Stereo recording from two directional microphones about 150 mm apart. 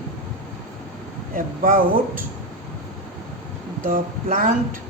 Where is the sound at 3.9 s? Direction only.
65° right (ahead or behind).